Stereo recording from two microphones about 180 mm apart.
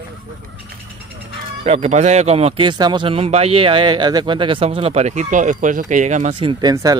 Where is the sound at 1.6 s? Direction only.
35° right (ahead or behind).